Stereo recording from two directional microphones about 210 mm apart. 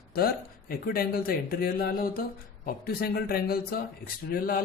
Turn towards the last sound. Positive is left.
turn(degrees=45)  # may be behind; listen again after turning